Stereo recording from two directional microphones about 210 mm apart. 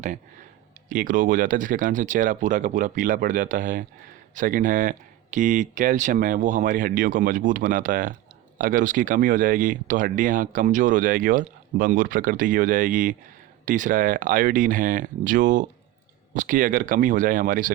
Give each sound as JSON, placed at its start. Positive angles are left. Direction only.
{"t": 0.9, "sound": "speech", "side_deg": -40}